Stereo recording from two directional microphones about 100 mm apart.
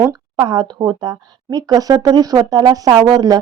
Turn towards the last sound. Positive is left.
turn(degrees=-40)  # may be behind; listen again after turning